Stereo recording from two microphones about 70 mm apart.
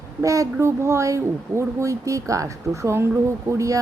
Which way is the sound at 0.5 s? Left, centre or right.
Right.